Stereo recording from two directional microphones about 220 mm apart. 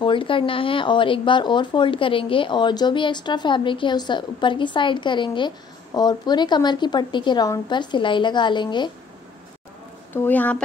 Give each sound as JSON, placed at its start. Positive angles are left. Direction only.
{"t": 0.0, "sound": "speech", "side_deg": 20}
{"t": 10.1, "sound": "speech", "side_deg": 10}